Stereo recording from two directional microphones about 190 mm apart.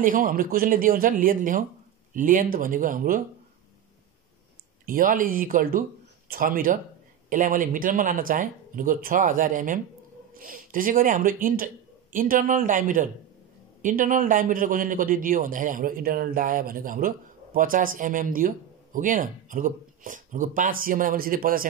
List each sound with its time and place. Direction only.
0.0 s a man's voice: 45° right (ahead or behind)
4.8 s a man's voice: 45° right (ahead or behind)